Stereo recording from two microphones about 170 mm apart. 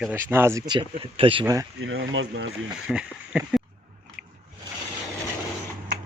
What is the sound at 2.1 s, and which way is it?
Speech, 90° right.